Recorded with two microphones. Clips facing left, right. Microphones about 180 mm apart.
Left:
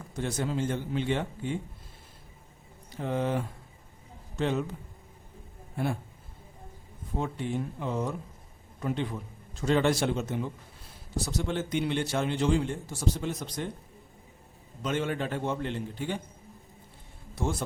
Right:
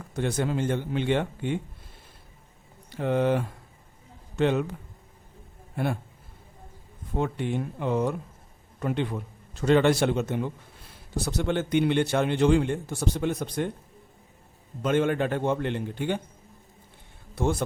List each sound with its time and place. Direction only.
0.2 s a man's voice: 60° right (ahead or behind)
2.9 s a man's voice: 65° right (ahead or behind)
5.7 s a man's voice: 65° right (ahead or behind)
7.2 s a man's voice: 65° right (ahead or behind)
9.6 s a man's voice: 65° right (ahead or behind)
14.8 s a man's voice: 55° right (ahead or behind)
17.4 s speech: 65° right (ahead or behind)